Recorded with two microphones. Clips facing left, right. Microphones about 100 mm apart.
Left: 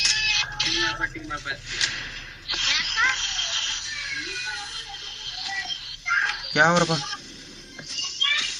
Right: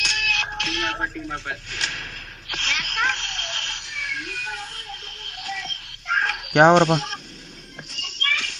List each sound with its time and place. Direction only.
0.0 s music: 50° right (ahead or behind)
1.5 s a sound: 45° right (ahead or behind)
3.8 s music: 50° right (ahead or behind)
6.1 s speech: 45° right (ahead or behind)
7.9 s music: 45° right (ahead or behind)